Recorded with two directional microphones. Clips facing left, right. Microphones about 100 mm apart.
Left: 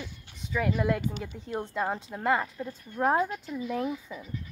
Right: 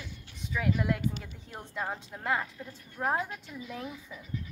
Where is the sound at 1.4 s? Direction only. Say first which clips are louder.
Left 6 dB; 20° left (ahead or behind).